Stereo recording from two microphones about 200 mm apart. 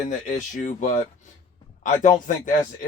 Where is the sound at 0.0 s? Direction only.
40° left (ahead or behind).